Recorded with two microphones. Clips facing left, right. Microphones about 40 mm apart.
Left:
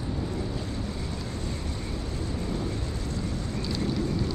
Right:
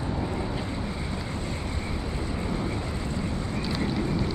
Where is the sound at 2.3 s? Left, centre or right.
Right.